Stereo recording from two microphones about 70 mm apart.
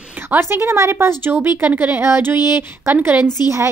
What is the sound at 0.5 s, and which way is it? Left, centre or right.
A woman's voice, right.